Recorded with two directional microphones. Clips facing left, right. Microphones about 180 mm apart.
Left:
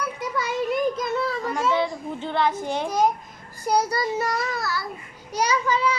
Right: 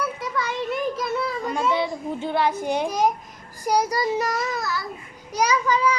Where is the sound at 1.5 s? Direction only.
15° right (ahead or behind).